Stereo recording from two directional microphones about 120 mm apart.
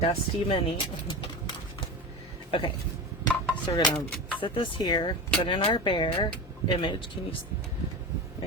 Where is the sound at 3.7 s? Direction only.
40° left (ahead or behind).